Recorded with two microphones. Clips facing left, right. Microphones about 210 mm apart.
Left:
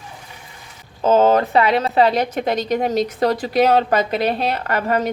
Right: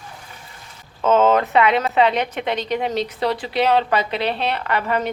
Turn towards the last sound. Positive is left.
turn(degrees=45)  # may be behind; listen again after turning